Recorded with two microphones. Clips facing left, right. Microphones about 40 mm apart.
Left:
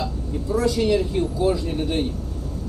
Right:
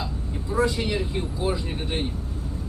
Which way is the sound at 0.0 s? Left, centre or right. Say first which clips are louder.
Left 5 dB; right.